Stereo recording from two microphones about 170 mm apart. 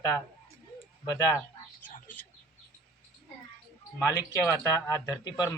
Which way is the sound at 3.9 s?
15° left (ahead or behind).